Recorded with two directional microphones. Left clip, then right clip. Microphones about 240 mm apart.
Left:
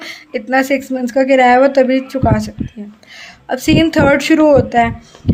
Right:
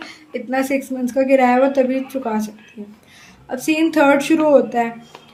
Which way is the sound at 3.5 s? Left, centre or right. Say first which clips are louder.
Left 5 dB; left.